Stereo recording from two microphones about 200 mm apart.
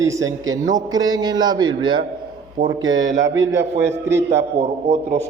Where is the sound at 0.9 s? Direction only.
20° right (ahead or behind).